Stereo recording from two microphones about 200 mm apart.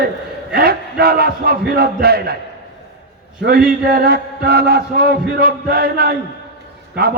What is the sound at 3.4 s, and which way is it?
Chant, 50° right (ahead or behind).